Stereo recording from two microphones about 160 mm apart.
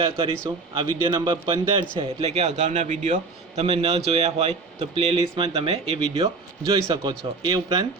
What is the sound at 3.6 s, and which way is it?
A man's voice, 40° right (ahead or behind).